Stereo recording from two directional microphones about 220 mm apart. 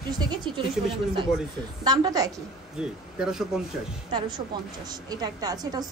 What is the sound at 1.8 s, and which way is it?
Speech, 15° right (ahead or behind).